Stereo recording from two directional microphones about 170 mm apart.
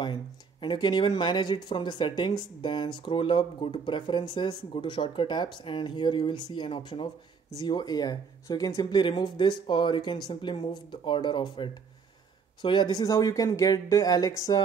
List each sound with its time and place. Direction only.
0.0 s speech: 25° left (ahead or behind)